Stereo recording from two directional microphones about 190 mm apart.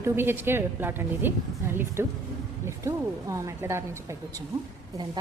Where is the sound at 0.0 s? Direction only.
10° right (ahead or behind).